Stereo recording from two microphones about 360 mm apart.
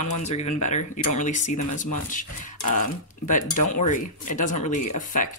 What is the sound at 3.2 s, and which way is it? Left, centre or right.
Speech, left.